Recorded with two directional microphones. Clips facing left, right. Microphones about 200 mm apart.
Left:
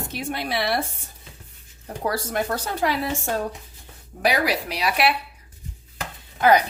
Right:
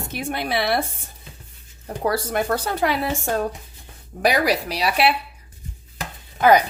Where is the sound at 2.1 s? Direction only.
55° right (ahead or behind).